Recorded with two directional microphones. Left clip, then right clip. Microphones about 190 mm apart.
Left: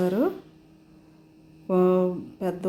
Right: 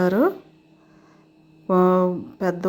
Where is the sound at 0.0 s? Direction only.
20° right (ahead or behind).